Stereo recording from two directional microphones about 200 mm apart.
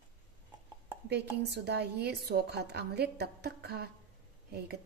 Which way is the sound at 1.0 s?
55° right (ahead or behind).